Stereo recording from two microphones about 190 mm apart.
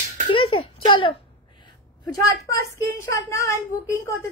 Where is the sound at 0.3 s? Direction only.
25° left (ahead or behind).